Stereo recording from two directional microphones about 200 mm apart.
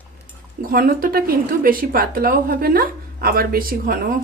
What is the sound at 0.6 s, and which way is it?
A woman's voice, 45° right (ahead or behind).